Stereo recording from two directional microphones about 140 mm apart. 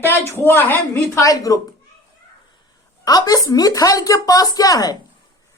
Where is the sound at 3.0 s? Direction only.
25° left (ahead or behind).